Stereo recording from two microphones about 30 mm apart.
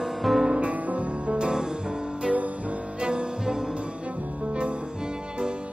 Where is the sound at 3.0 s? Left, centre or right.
Right.